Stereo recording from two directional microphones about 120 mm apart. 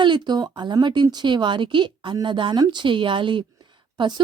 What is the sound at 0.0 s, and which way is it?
Speech, 40° right (ahead or behind).